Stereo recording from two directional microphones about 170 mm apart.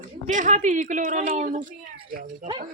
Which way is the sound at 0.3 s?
45° right (ahead or behind).